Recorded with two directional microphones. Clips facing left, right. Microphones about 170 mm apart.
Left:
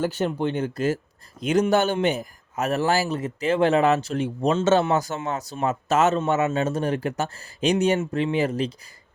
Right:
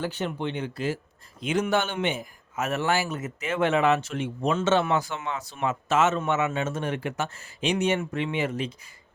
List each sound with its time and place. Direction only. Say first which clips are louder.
0.0 s a man's voice: left 5 dB; 40° left (ahead or behind)